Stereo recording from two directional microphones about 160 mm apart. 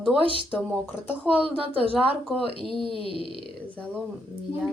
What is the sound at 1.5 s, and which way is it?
A woman's voice, 35° right (ahead or behind).